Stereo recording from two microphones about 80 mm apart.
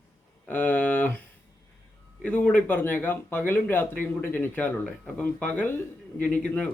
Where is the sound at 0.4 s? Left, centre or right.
Left.